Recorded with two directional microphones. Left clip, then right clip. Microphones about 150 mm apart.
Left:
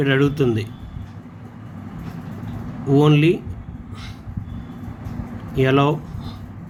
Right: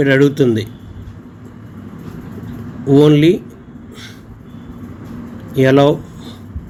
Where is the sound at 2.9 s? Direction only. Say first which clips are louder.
Right 6 dB; 25° right (ahead or behind).